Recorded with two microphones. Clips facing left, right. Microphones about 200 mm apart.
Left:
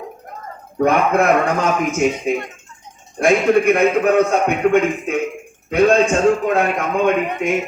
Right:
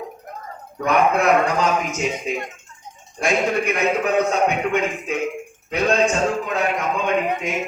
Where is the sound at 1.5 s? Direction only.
55° left (ahead or behind).